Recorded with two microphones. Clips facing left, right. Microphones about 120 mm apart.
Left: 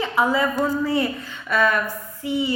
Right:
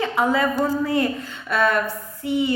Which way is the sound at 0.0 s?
55° right (ahead or behind).